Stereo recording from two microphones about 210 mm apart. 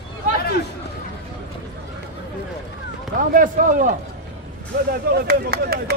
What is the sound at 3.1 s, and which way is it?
Speech, 40° right (ahead or behind).